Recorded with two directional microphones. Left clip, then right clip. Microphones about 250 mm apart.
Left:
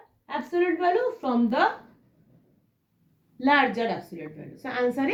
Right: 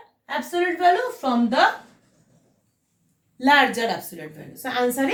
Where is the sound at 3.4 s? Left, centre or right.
Centre.